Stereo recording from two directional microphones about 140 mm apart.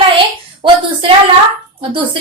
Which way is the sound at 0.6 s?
35° right (ahead or behind).